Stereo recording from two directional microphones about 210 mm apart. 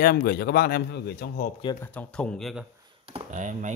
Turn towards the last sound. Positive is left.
turn(degrees=-35)  # may be behind; listen again after turning